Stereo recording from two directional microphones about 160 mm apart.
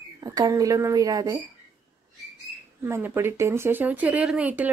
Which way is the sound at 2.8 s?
15° right (ahead or behind).